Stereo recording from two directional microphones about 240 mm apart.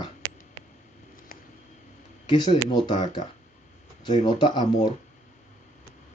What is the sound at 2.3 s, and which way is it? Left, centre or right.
Speech, centre.